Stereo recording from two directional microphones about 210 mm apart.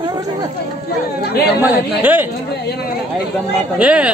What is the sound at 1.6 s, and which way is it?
Speech, 10° right (ahead or behind).